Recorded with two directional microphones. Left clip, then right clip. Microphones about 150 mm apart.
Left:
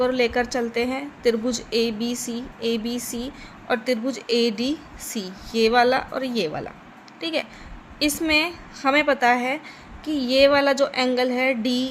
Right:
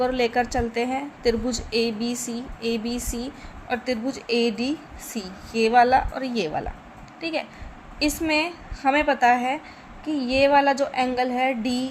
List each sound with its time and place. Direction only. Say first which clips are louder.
0.0 s a woman's voice: left 1 dB; 5° left (ahead or behind)